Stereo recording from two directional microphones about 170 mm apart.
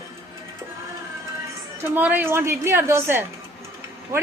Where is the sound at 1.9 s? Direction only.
10° right (ahead or behind).